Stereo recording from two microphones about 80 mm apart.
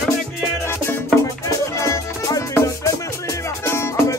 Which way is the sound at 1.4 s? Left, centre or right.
Left.